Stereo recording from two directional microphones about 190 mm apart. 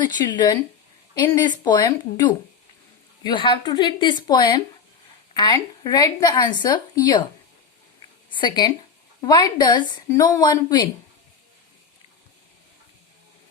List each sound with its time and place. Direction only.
0.0 s speech: 20° left (ahead or behind)
8.3 s speech: 25° left (ahead or behind)